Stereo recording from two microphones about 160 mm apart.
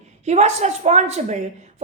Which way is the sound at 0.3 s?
45° right (ahead or behind).